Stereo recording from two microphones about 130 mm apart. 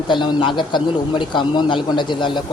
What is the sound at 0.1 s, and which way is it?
A man's voice, 35° left (ahead or behind).